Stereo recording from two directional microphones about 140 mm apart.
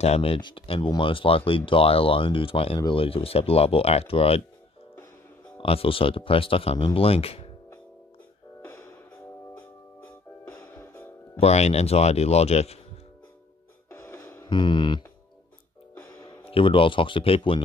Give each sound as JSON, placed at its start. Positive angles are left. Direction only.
{"t": 0.0, "sound": "speech", "side_deg": 45}
{"t": 5.6, "sound": "speech", "side_deg": 40}
{"t": 10.0, "sound": "music", "side_deg": 15}
{"t": 11.3, "sound": "speech", "side_deg": 50}
{"t": 13.8, "sound": "music", "side_deg": 15}
{"t": 14.4, "sound": "speech", "side_deg": 35}
{"t": 16.4, "sound": "speech", "side_deg": 40}